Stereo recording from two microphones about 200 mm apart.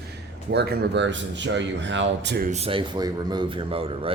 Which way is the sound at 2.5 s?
30° right (ahead or behind).